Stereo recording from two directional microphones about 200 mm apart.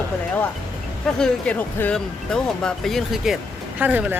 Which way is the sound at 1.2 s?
5° left (ahead or behind).